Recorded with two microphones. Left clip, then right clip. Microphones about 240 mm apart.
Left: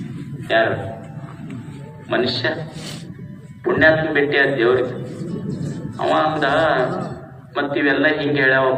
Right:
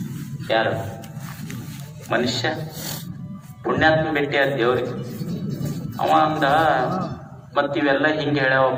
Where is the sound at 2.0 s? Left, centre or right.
Right.